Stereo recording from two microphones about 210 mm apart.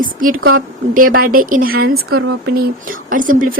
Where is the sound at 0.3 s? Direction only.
85° right.